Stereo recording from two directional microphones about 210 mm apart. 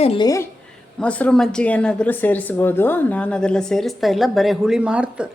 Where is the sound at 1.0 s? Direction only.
5° left (ahead or behind).